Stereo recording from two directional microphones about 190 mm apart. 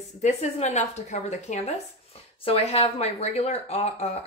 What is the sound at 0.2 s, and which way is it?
Speech, 35° left (ahead or behind).